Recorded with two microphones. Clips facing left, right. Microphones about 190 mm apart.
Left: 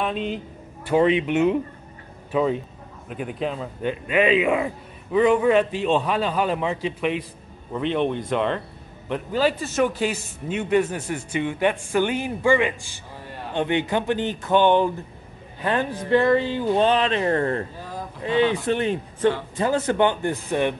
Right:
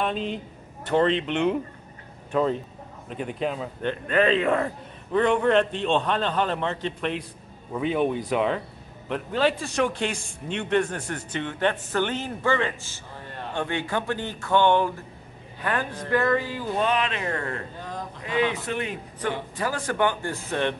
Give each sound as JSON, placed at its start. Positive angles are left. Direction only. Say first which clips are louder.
{"t": 0.0, "sound": "a man's voice", "louder": "left 1 dB", "side_deg": 0}
{"t": 17.7, "sound": "a sound", "louder": "left 1 dB", "side_deg": 5}
{"t": 18.2, "sound": "speech", "louder": "left 5 dB", "side_deg": 30}